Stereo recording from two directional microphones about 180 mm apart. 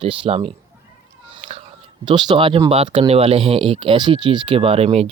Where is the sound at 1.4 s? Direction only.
40° right (ahead or behind).